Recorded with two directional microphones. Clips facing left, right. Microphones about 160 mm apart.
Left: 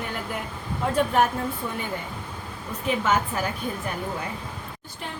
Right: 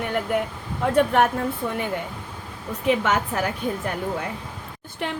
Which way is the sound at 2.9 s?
80° right.